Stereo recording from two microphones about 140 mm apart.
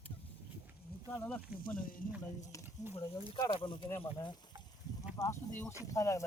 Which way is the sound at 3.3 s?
30° left (ahead or behind).